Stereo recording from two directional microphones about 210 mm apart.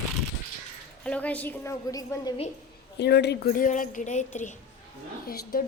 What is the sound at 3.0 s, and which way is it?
A woman's voice, 55° left (ahead or behind).